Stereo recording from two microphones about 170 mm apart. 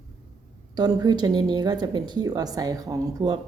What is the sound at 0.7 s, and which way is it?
A woman's voice, 25° right (ahead or behind).